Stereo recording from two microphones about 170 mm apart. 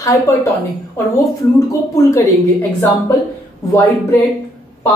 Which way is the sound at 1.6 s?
20° left (ahead or behind).